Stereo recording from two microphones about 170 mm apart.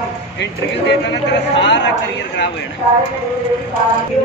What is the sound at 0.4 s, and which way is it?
A man's voice, 90° left.